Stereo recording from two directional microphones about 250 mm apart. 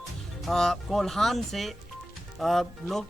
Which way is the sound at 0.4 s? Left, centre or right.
Centre.